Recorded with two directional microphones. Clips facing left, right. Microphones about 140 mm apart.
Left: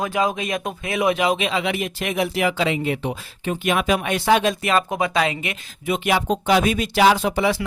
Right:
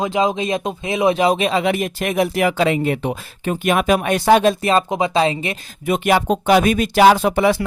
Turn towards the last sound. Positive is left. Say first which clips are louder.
# right 4 dB
turn(degrees=-50)  # may be behind; listen again after turning